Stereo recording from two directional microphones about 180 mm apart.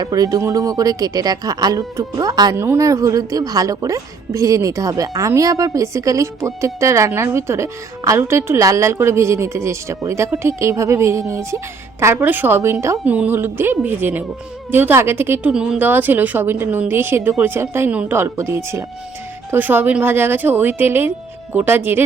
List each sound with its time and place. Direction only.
0.0 s a woman's voice: 20° right (ahead or behind)